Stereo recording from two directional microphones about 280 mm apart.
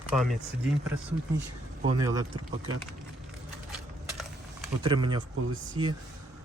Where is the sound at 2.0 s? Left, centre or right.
Centre.